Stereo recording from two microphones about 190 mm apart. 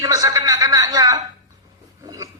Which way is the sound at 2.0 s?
20° right (ahead or behind).